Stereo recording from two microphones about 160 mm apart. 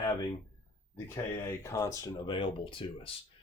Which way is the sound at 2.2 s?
35° left (ahead or behind).